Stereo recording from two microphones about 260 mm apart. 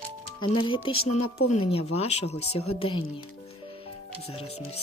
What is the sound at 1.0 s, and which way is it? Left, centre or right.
Speech, left.